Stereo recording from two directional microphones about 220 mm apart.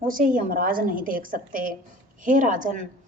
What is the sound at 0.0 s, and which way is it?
Speech, 40° right (ahead or behind).